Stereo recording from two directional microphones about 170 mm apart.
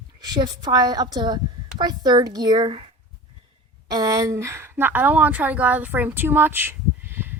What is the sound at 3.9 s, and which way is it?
A woman's voice, 20° right (ahead or behind).